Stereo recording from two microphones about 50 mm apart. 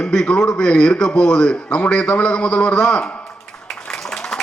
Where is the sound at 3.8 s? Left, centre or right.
Centre.